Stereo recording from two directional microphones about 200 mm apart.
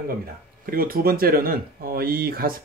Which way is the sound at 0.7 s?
45° right (ahead or behind).